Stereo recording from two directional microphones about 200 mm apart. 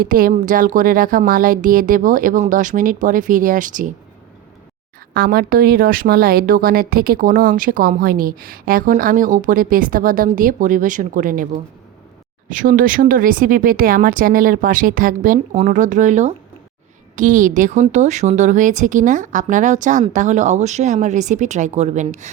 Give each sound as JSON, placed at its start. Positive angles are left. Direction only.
{"t": 0.0, "sound": "speech", "side_deg": -45}
{"t": 5.1, "sound": "a woman's voice", "side_deg": -50}